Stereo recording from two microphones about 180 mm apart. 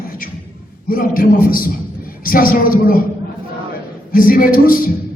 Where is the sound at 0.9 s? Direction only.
55° left (ahead or behind).